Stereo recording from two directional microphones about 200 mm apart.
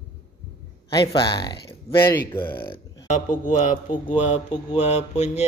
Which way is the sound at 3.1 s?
40° left (ahead or behind).